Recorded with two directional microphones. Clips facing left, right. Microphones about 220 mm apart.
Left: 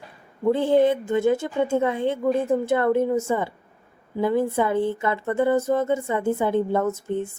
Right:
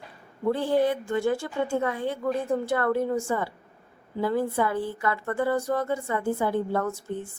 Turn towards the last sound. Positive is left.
turn(degrees=20)  # may be behind; listen again after turning